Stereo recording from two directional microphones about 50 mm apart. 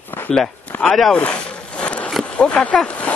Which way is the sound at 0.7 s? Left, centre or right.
Left.